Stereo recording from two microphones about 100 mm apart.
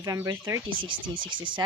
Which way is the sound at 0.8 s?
55° right (ahead or behind).